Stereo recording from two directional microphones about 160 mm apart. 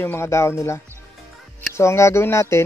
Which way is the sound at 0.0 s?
15° left (ahead or behind).